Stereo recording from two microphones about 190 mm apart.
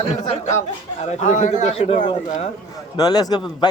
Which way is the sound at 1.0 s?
35° left (ahead or behind).